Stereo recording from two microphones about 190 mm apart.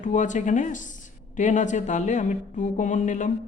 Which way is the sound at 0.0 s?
40° left (ahead or behind).